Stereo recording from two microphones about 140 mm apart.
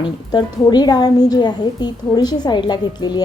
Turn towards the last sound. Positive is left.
turn(degrees=30)  # may be behind; listen again after turning